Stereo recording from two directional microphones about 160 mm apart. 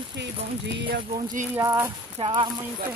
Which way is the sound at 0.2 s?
90° right.